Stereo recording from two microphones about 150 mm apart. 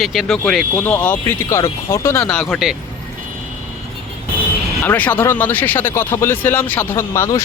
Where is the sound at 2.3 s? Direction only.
5° left (ahead or behind).